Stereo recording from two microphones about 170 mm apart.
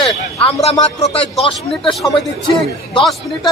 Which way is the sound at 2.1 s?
30° left (ahead or behind).